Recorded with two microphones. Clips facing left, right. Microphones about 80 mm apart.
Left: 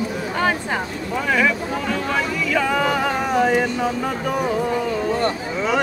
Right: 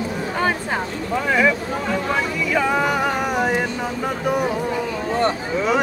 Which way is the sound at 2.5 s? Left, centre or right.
Centre.